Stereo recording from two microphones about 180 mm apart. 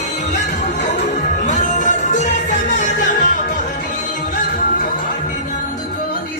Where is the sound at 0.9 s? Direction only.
40° left (ahead or behind).